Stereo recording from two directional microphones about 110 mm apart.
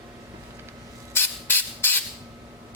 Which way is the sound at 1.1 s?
20° left (ahead or behind).